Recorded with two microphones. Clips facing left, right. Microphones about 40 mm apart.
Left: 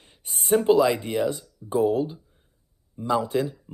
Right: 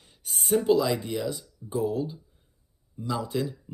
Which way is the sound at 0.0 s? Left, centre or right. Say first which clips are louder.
Left 1 dB; left.